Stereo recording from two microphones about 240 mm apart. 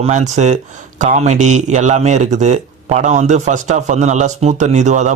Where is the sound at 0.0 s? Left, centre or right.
Right.